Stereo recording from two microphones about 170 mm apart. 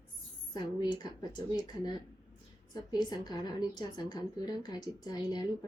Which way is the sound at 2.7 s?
25° left (ahead or behind).